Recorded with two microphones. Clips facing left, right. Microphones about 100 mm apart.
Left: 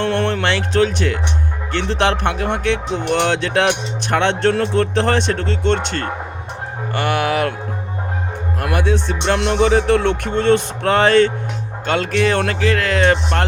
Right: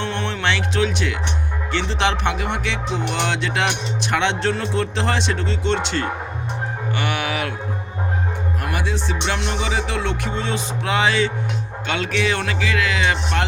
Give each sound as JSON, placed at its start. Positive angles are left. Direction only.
{"t": 0.0, "sound": "music", "side_deg": 55}
{"t": 0.4, "sound": "speech", "side_deg": 45}
{"t": 8.6, "sound": "music", "side_deg": 55}
{"t": 11.9, "sound": "speech", "side_deg": 45}